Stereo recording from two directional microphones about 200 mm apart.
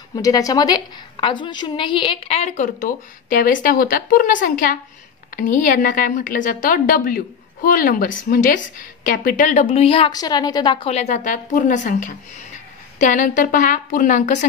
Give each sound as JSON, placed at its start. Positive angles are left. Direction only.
{"t": 0.1, "sound": "a woman's voice", "side_deg": 15}